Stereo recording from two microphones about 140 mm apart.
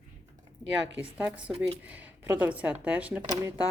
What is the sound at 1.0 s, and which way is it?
Speech, 10° right (ahead or behind).